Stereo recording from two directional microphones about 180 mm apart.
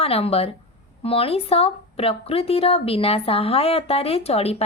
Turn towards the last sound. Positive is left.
turn(degrees=35)  # may be behind; listen again after turning